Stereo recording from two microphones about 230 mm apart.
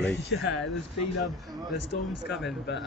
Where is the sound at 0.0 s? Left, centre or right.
Left.